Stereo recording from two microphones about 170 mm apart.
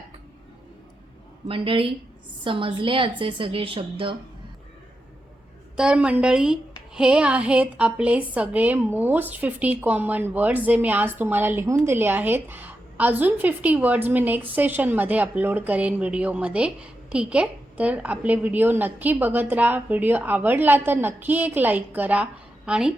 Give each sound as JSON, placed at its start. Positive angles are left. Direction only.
{"t": 1.5, "sound": "a woman's voice", "side_deg": -30}
{"t": 5.7, "sound": "a woman's voice", "side_deg": -5}